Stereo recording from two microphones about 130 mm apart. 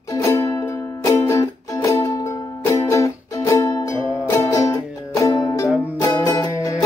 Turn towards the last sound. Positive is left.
turn(degrees=25)  # may be behind; listen again after turning